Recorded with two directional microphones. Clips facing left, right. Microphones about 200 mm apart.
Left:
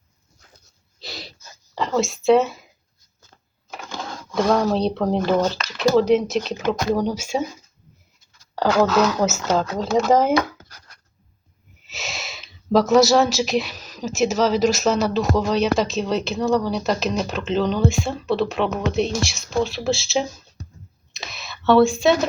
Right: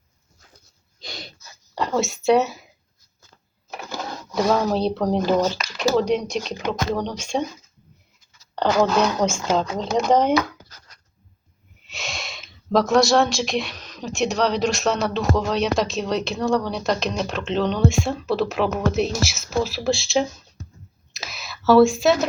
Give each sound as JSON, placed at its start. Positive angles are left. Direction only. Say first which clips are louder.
{"t": 0.9, "sound": "gasp", "louder": "left 1 dB", "side_deg": 5}
{"t": 1.7, "sound": "speech", "louder": "left 1 dB", "side_deg": 0}
{"t": 3.8, "sound": "speech", "louder": "right 1 dB", "side_deg": -5}
{"t": 5.4, "sound": "speech", "louder": "even", "side_deg": -10}
{"t": 5.7, "sound": "speech", "louder": "left 4 dB", "side_deg": 0}
{"t": 8.5, "sound": "speech", "louder": "left 1 dB", "side_deg": 5}
{"t": 11.9, "sound": "speech", "louder": "even", "side_deg": 0}
{"t": 21.1, "sound": "a sound", "louder": "even", "side_deg": 0}